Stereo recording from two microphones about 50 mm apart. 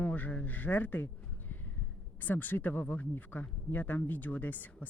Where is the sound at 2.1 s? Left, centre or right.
Left.